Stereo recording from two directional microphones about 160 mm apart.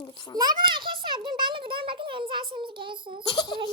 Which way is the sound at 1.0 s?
30° right (ahead or behind).